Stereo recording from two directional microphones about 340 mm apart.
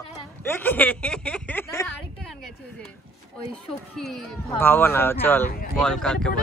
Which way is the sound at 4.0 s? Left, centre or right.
Centre.